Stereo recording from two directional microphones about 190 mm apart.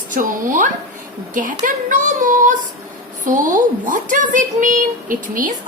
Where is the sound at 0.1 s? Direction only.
45° right (ahead or behind).